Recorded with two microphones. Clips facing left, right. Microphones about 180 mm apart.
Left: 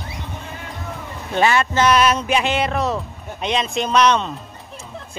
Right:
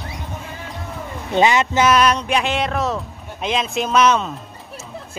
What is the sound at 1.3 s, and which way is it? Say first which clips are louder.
Speech: right 2 dB; 20° right (ahead or behind).